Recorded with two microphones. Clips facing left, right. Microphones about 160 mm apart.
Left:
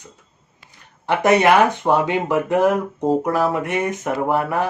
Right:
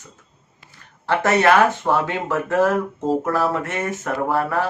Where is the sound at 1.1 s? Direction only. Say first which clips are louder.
Left 2 dB; 15° left (ahead or behind).